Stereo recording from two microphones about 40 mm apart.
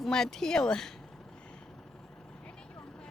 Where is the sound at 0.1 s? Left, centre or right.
Centre.